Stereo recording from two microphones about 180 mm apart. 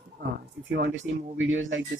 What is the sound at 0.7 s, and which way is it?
Speech, 75° right (ahead or behind).